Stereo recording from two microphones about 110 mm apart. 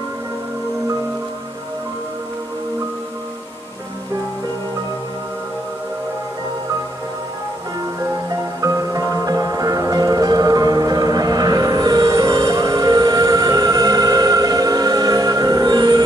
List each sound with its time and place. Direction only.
8.5 s music: 30° right (ahead or behind)